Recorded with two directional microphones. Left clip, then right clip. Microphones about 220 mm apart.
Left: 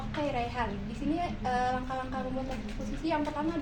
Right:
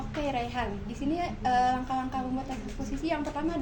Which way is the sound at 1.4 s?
45° right (ahead or behind).